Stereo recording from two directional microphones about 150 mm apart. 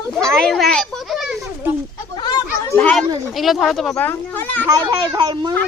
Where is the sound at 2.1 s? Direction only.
25° left (ahead or behind).